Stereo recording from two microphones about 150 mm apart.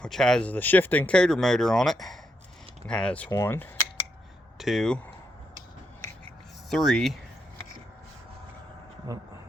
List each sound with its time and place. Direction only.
0.0 s speech: 5° left (ahead or behind)
3.2 s speech: 15° left (ahead or behind)
4.5 s speech: centre (ahead or behind)
6.7 s speech: 5° left (ahead or behind)
9.1 s speech: 20° right (ahead or behind)